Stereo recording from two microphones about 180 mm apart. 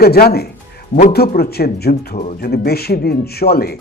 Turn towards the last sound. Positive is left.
turn(degrees=60)  # may be behind; listen again after turning